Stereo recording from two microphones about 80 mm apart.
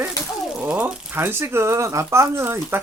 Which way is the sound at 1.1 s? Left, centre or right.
Right.